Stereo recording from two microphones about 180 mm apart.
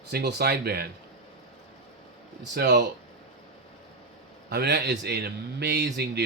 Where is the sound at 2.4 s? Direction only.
70° right (ahead or behind).